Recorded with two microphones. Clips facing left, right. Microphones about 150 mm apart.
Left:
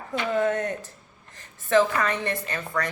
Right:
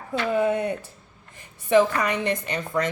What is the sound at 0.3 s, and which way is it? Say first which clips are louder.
A woman's voice: right 2 dB; 10° right (ahead or behind).